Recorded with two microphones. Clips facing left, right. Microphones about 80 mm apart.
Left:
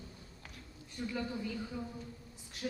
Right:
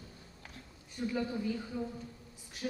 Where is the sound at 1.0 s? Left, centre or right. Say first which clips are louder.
Right 4 dB; right.